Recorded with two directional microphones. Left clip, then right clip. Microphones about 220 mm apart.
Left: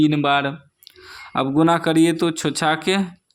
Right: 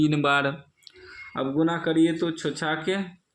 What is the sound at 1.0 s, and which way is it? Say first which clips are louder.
Speech: left 7 dB; 40° left (ahead or behind).